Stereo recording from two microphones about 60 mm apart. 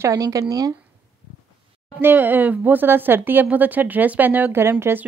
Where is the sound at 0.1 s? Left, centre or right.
Right.